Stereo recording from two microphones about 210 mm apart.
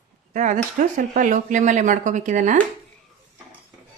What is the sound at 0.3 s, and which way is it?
Speech, 40° right (ahead or behind).